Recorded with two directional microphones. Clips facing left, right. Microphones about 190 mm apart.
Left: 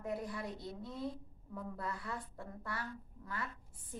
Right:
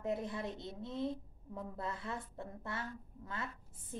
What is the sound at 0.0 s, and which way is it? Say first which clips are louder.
A woman's voice: right 2 dB; 25° right (ahead or behind).